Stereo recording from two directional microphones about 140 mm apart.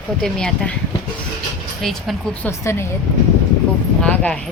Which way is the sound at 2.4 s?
20° left (ahead or behind).